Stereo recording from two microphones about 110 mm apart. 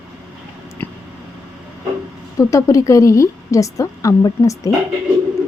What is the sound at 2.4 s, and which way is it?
A woman's voice, 30° left (ahead or behind).